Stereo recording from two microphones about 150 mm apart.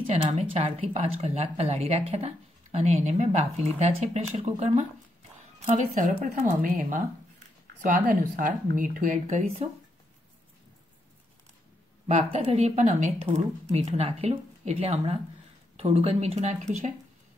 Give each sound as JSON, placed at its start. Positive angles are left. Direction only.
{"t": 0.1, "sound": "speech", "side_deg": -45}
{"t": 6.2, "sound": "speech", "side_deg": -65}
{"t": 12.1, "sound": "speech", "side_deg": -45}